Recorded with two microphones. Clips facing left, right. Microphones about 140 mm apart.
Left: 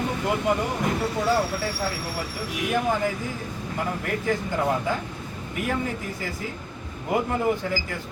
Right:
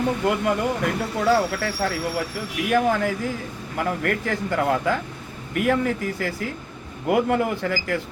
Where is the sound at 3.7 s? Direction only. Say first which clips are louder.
Right 4 dB; 90° right.